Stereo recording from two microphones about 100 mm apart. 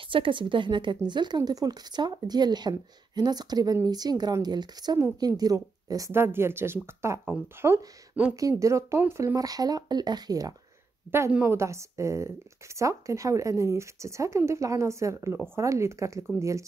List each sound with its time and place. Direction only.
0.1 s a woman's voice: 55° right (ahead or behind); by 6.1 s 35° right (ahead or behind)
6.1 s speech: 25° right (ahead or behind); by 10.5 s 40° right (ahead or behind)
11.1 s speech: 25° right (ahead or behind)